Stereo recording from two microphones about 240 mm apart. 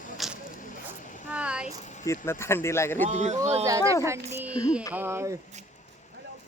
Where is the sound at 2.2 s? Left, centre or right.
Centre.